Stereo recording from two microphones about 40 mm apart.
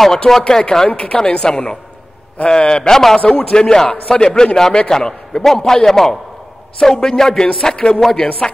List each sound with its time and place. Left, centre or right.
0.0 s a man's voice: centre
0.8 s speech: left
1.1 s a woman's voice: centre